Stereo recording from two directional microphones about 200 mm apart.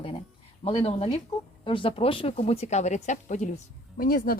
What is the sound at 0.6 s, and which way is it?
Speech, 30° left (ahead or behind).